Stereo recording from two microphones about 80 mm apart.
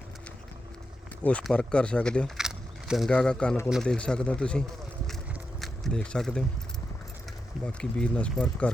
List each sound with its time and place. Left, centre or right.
1.2 s speech: centre
2.4 s a sound: centre
3.1 s speech: centre
5.5 s a sound: centre
6.0 s speech: centre
7.6 s speech: centre